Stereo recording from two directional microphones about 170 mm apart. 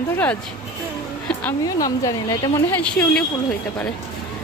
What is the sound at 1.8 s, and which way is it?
A woman's voice, 20° left (ahead or behind).